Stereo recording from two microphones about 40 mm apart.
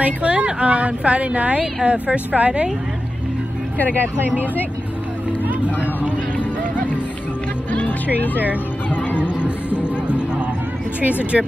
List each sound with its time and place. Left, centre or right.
0.0 s speech: right
7.7 s music: left
9.4 s music: left
11.0 s speech: right